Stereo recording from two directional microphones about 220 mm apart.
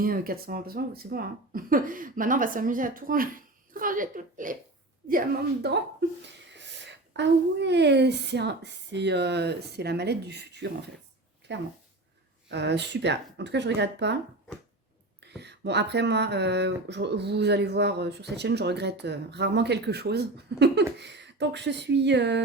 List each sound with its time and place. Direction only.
0.0 s speech: 40° right (ahead or behind)
5.6 s speech: 50° right (ahead or behind)
15.4 s speech: 50° right (ahead or behind)